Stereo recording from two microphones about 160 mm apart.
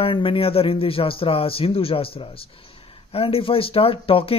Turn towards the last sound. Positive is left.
turn(degrees=35)  # may be behind; listen again after turning